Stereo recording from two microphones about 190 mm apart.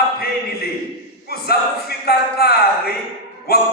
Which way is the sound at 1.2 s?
55° left (ahead or behind).